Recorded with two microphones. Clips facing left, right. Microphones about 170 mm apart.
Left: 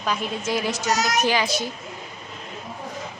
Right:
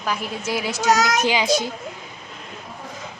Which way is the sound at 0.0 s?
5° right (ahead or behind).